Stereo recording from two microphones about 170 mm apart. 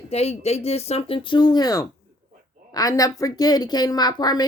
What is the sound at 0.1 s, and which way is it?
A woman's voice, 40° left (ahead or behind).